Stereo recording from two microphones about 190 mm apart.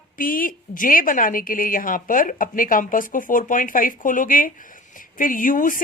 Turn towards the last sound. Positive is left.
turn(degrees=45)  # may be behind; listen again after turning